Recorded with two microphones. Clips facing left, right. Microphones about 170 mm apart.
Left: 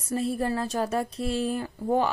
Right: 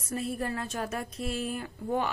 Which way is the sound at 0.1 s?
30° left (ahead or behind).